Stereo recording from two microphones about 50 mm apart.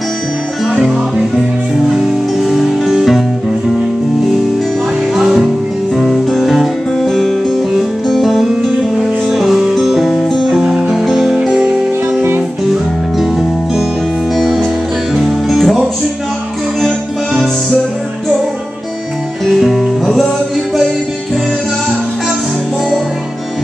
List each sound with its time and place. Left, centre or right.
1.9 s music: centre
5.1 s music: centre
11.3 s music: centre
12.2 s music: right
14.3 s music: centre
16.8 s music: centre
19.4 s music: centre